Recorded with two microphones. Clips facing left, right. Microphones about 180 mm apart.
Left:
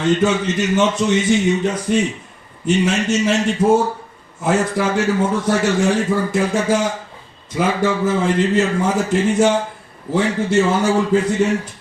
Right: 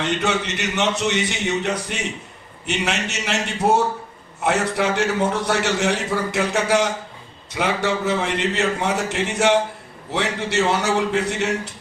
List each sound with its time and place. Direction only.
0.2 s a man's voice: 70° right (ahead or behind)